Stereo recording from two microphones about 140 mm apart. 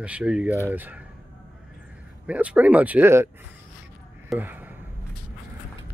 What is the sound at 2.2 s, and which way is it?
Speech, 10° right (ahead or behind).